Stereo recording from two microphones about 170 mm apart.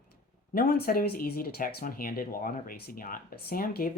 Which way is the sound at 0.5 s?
65° left (ahead or behind).